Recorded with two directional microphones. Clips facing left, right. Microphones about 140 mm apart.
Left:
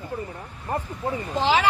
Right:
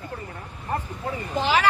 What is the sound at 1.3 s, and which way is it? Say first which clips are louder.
Speech: left 1 dB; 25° left (ahead or behind).